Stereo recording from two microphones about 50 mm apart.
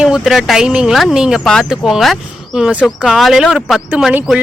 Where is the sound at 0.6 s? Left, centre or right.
Centre.